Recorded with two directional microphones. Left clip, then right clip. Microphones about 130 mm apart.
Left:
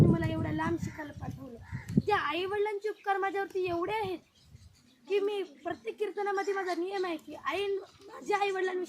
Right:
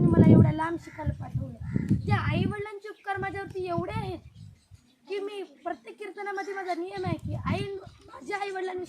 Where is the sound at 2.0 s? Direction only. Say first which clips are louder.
Left 3 dB; 20° right (ahead or behind).